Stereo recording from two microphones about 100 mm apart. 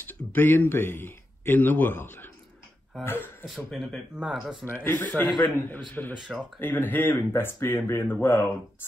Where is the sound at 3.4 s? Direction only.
Centre (ahead or behind).